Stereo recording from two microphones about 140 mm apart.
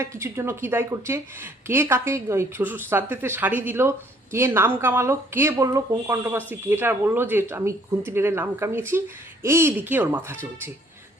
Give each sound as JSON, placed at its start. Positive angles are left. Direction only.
{"t": 0.0, "sound": "speech", "side_deg": -20}